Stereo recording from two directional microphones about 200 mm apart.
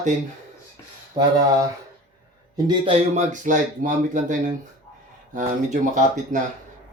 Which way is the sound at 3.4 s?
40° right (ahead or behind).